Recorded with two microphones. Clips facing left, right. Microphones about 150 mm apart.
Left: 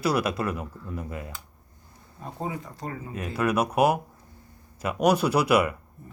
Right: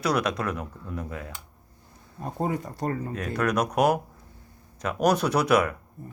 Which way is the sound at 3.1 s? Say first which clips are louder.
Even; 5° left (ahead or behind).